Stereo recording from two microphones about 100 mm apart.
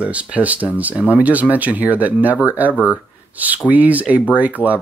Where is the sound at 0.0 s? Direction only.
15° right (ahead or behind).